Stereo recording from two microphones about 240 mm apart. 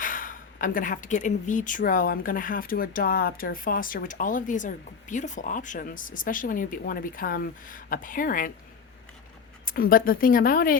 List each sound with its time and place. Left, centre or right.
0.0 s speech: left
9.6 s speech: left